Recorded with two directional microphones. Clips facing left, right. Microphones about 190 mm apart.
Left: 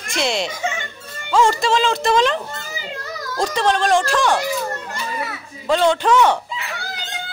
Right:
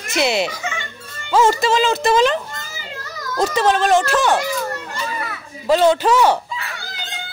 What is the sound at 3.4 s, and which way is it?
Speech, 5° right (ahead or behind).